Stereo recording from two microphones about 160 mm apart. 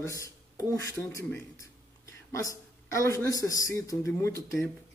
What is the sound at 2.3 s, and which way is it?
Speech, 20° left (ahead or behind).